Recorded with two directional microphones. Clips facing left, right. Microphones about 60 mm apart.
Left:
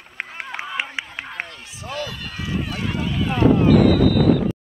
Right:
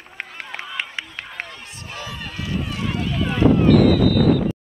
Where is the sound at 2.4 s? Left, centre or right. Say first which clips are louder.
Left 1 dB; left.